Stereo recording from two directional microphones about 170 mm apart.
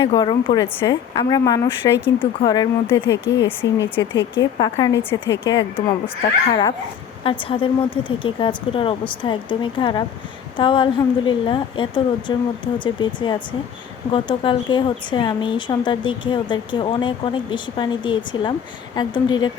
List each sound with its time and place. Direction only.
0.0 s speech: 25° left (ahead or behind)
2.1 s speech: 25° left (ahead or behind)